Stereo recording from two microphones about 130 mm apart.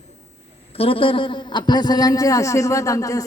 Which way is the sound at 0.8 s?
45° left (ahead or behind).